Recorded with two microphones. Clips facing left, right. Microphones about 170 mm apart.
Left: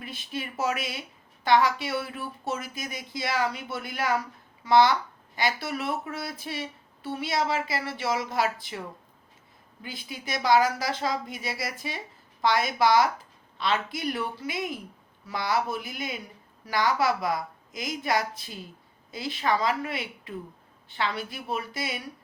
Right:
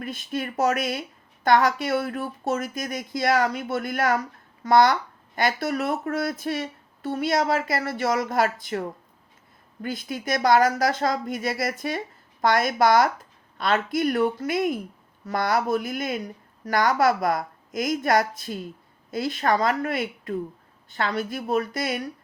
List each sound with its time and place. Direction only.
0.0 s speech: 50° right (ahead or behind)
9.8 s speech: 50° right (ahead or behind)